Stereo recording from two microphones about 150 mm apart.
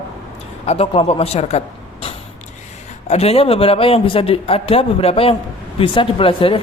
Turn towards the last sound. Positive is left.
turn(degrees=35)  # may be behind; listen again after turning